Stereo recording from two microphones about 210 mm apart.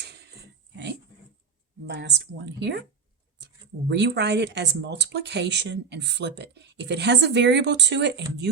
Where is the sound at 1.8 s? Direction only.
50° right (ahead or behind).